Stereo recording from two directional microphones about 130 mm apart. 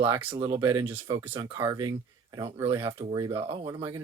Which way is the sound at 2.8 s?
45° right (ahead or behind).